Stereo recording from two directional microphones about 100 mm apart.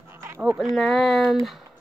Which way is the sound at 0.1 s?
25° right (ahead or behind).